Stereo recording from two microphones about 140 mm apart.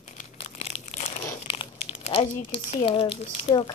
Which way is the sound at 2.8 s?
40° left (ahead or behind).